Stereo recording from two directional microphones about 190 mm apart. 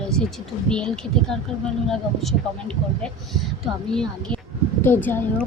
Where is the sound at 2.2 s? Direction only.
5° left (ahead or behind).